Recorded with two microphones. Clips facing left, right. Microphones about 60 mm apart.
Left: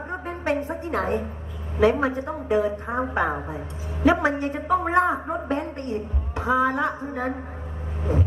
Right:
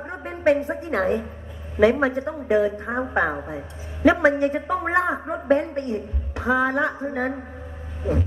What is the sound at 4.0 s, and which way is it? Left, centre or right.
A woman's voice, right.